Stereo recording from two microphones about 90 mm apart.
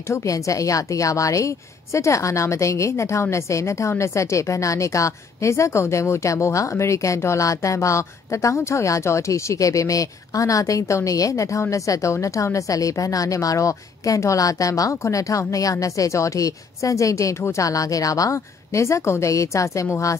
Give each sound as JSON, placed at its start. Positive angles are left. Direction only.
{"t": 0.1, "sound": "a woman's voice", "side_deg": 35}